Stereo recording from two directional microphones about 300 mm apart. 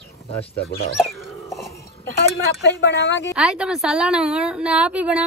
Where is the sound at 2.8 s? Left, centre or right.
Left.